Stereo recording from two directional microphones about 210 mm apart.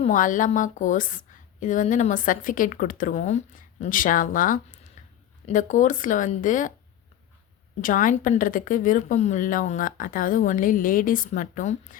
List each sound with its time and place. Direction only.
0.0 s a woman's voice: 40° left (ahead or behind)
7.8 s a woman's voice: 40° left (ahead or behind)